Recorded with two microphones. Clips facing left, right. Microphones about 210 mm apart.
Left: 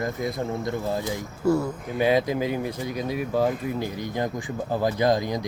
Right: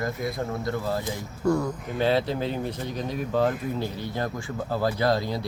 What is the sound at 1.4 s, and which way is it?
Speech, 5° left (ahead or behind).